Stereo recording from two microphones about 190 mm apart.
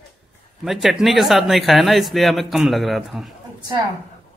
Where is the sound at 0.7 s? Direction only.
Centre (ahead or behind).